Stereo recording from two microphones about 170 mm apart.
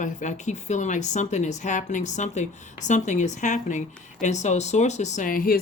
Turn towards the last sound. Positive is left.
turn(degrees=60)  # may be behind; listen again after turning